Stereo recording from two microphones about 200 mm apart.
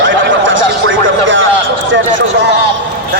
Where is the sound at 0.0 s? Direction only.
70° right (ahead or behind).